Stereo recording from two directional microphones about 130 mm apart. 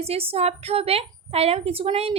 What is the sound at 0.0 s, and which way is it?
A woman's voice, 50° right (ahead or behind).